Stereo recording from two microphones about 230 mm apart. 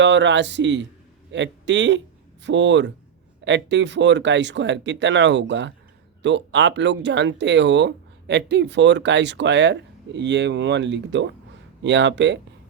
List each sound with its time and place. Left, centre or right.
0.0 s speech: right